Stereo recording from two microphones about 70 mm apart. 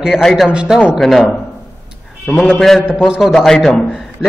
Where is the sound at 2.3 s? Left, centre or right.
Centre.